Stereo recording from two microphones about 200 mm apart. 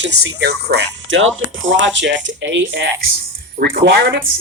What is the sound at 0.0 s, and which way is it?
Speech, 60° right (ahead or behind).